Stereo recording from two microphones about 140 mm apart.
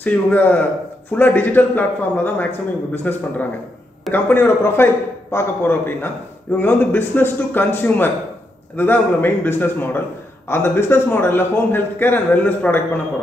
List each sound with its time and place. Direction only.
0.0 s a man's voice: 10° left (ahead or behind)